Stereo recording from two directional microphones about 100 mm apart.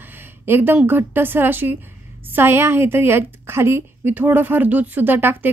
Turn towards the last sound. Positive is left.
turn(degrees=-20)  # may be behind; listen again after turning